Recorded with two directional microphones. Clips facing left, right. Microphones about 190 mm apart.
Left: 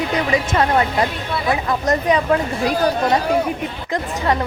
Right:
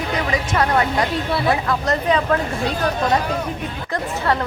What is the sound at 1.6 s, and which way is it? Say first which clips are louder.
Speech: left 2 dB; 15° left (ahead or behind).